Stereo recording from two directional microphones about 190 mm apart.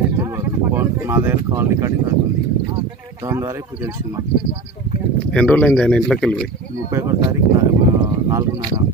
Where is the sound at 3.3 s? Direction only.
15° right (ahead or behind).